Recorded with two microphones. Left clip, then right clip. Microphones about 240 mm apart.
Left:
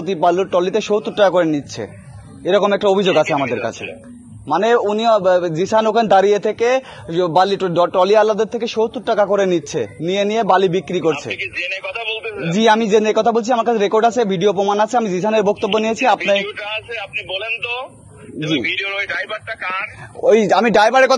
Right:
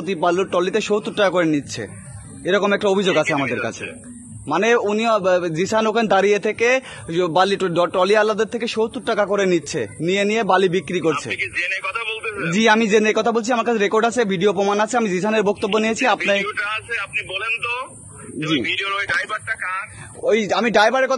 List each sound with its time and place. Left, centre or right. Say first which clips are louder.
0.0 s a man's voice: left 4 dB; centre
11.2 s a man's voice: even; right
12.2 s a man's voice: left 2 dB; centre
16.6 s a man's voice: right 1 dB; right
18.4 s a man's voice: left 2 dB; centre
19.4 s speech: left 2 dB; centre